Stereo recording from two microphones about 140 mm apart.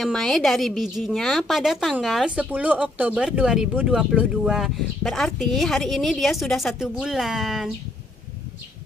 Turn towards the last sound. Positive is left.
turn(degrees=0)  # may be behind; listen again after turning